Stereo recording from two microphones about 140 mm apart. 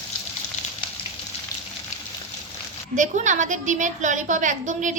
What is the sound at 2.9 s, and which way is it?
A woman's voice, 60° right (ahead or behind).